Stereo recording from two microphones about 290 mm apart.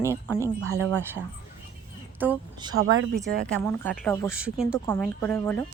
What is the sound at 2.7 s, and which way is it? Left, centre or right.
Speech, right.